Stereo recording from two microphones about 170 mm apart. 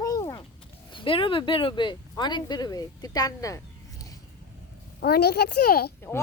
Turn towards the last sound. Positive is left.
turn(degrees=65)  # may be behind; listen again after turning